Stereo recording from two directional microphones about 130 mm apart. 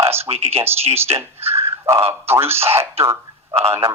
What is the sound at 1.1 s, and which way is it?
Speech, 20° right (ahead or behind).